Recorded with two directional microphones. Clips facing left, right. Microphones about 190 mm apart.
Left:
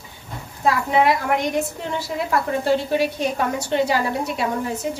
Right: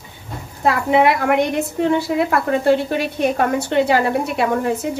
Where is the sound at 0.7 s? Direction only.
65° right (ahead or behind).